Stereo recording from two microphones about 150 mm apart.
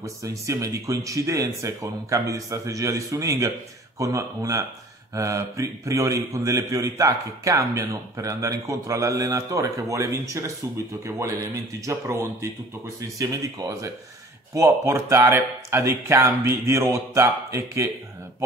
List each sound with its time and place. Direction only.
0.0 s a man's voice: 20° right (ahead or behind)